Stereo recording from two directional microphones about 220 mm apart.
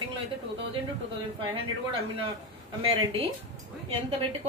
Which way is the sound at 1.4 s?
25° right (ahead or behind).